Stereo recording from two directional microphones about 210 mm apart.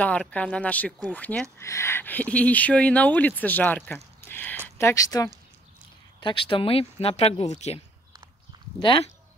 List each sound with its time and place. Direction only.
0.0 s speech: 5° left (ahead or behind); by 9.1 s 25° left (ahead or behind)